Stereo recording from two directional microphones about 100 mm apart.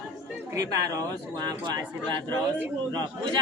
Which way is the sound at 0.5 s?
35° right (ahead or behind).